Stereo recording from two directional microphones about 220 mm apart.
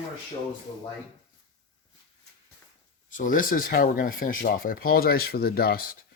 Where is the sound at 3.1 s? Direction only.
35° left (ahead or behind).